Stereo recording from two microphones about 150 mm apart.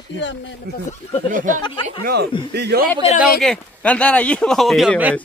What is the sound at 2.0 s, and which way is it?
Speech, 90° right.